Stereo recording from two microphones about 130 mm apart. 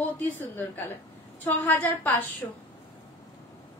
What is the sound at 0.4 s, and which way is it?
A woman's voice, 15° left (ahead or behind).